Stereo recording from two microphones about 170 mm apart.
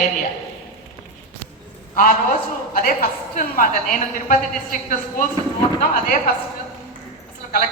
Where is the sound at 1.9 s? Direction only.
55° left (ahead or behind).